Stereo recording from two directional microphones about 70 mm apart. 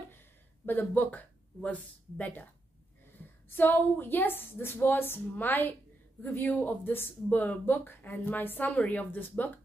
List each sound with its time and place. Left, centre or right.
0.7 s speech: left
3.4 s speech: left